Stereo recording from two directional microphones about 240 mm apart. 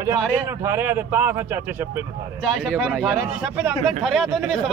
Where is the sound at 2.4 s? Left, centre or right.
Centre.